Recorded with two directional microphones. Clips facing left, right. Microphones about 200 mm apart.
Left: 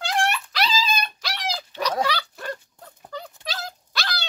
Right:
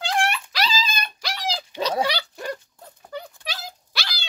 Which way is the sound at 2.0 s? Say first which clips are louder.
Even; 25° right (ahead or behind).